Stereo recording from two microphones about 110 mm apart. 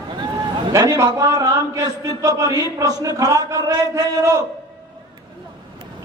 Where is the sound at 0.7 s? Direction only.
30° right (ahead or behind).